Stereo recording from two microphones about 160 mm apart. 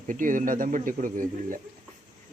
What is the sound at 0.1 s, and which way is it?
Speech, 55° right (ahead or behind).